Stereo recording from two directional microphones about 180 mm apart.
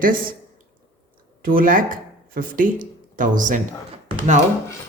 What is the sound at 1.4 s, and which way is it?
Speech, 50° right (ahead or behind).